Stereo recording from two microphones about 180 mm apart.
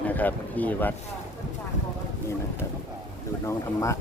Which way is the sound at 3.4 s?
15° left (ahead or behind).